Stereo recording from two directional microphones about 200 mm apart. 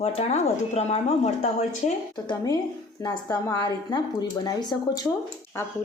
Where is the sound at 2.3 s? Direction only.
20° left (ahead or behind).